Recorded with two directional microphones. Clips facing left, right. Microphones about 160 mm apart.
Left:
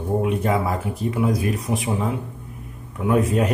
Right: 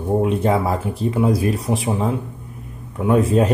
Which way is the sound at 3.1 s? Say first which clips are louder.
Right 3 dB; 30° right (ahead or behind).